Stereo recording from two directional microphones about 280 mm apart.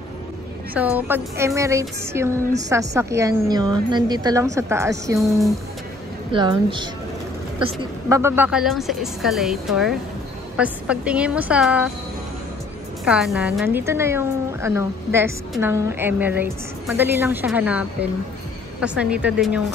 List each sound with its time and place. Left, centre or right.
0.7 s a woman's voice: centre
8.1 s a woman's voice: centre
13.0 s a woman's voice: centre